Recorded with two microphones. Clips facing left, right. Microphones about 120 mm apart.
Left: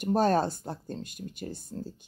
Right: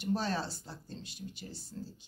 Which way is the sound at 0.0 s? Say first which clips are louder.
Left 9 dB; 50° left (ahead or behind).